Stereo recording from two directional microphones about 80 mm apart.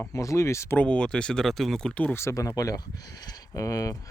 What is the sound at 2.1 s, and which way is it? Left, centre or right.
Speech, left.